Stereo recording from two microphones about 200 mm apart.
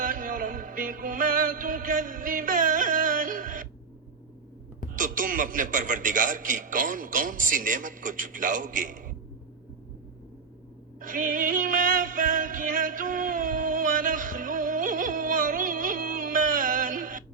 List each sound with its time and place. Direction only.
0.0 s music: 40° right (ahead or behind)
4.9 s a man's voice: 40° right (ahead or behind)
11.0 s music: 40° right (ahead or behind)